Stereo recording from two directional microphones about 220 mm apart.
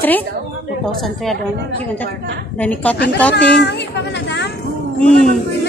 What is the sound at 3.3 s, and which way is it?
A woman's voice, 50° left (ahead or behind).